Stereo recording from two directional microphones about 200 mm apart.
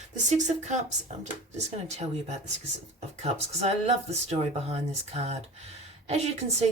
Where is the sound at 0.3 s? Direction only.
35° right (ahead or behind).